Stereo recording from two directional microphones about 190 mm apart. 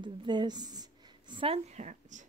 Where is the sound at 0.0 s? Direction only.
25° right (ahead or behind).